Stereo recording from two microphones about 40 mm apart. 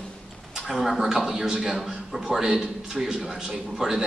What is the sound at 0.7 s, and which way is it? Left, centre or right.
A man's voice, centre.